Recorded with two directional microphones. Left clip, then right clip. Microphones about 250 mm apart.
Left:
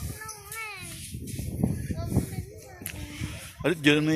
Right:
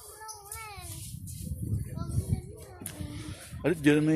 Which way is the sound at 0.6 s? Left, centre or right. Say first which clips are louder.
Left 7 dB; right.